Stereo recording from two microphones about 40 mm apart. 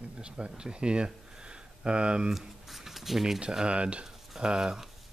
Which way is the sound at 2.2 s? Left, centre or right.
Centre.